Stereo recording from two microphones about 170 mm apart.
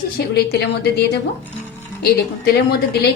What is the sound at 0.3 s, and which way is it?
A woman's voice, 75° left (ahead or behind).